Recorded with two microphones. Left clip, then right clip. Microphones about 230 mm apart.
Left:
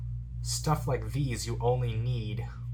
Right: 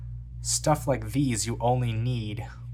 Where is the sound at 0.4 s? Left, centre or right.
Right.